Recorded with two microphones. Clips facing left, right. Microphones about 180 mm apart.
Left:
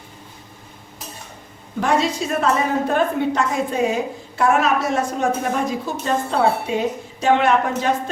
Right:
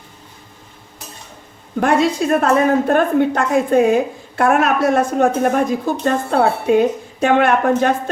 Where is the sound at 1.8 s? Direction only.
55° right (ahead or behind).